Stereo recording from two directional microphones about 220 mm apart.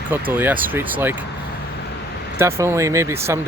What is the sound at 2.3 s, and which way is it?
Speech, 10° right (ahead or behind).